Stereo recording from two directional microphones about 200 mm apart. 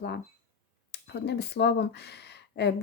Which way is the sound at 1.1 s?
55° left (ahead or behind).